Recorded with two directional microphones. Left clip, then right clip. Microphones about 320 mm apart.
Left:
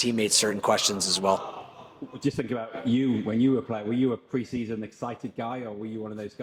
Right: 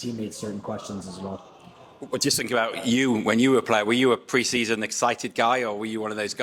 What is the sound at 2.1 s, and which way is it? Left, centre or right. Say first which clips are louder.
Speech: right 7 dB; centre.